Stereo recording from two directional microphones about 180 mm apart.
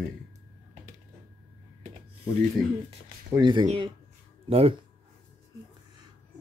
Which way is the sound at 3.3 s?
25° right (ahead or behind).